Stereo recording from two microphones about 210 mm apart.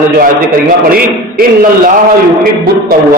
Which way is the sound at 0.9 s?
40° right (ahead or behind).